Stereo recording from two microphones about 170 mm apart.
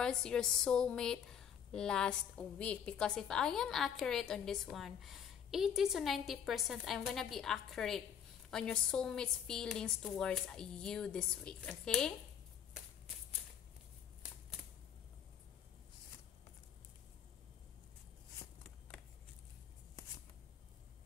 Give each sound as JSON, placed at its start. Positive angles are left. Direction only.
{"t": 0.0, "sound": "a woman's voice", "side_deg": 5}